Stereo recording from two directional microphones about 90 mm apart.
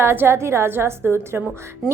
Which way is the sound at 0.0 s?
25° right (ahead or behind).